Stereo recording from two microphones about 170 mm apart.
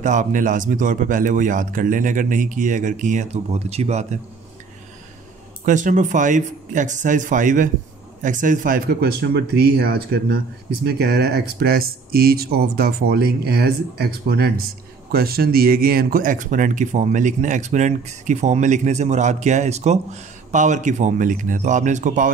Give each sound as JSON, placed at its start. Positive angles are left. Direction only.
{"t": 0.0, "sound": "speech", "side_deg": -45}
{"t": 5.7, "sound": "speech", "side_deg": -45}